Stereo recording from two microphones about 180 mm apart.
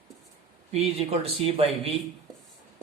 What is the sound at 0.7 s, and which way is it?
Speech, 35° right (ahead or behind).